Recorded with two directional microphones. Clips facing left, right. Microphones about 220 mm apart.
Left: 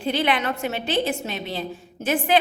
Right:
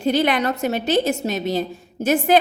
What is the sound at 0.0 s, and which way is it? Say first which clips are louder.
A woman's voice: right 4 dB; 45° right (ahead or behind).